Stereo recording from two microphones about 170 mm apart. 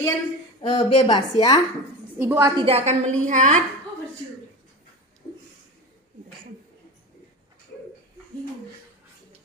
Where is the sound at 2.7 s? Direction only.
40° right (ahead or behind).